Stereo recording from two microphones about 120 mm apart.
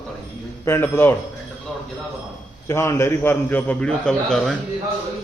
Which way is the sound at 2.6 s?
25° left (ahead or behind).